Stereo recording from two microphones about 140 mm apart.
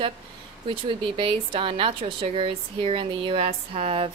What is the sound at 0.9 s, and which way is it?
A woman's voice, 35° right (ahead or behind).